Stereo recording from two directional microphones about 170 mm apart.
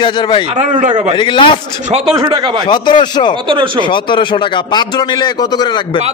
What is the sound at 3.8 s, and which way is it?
Speech, 30° left (ahead or behind).